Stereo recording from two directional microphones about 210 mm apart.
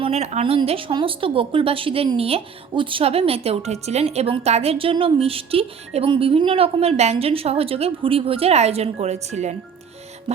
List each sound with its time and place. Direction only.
0.0 s speech: 30° right (ahead or behind)